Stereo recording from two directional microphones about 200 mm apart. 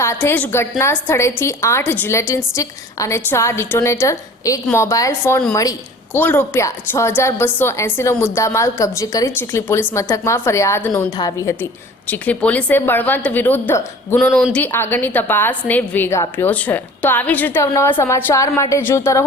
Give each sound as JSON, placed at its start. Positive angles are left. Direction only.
{"t": 0.0, "sound": "a woman's voice", "side_deg": 10}